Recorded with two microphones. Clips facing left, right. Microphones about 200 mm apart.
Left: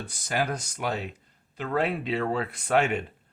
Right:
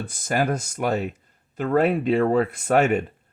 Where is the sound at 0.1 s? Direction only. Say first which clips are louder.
Right 5 dB; 50° right (ahead or behind).